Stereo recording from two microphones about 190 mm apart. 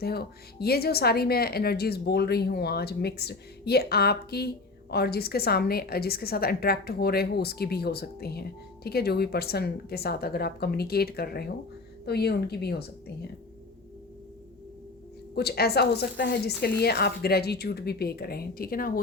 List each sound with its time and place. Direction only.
0.0 s speech: 55° left (ahead or behind)
15.4 s speech: 55° left (ahead or behind)